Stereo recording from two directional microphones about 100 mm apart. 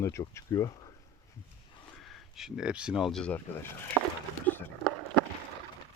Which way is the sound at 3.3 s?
25° left (ahead or behind).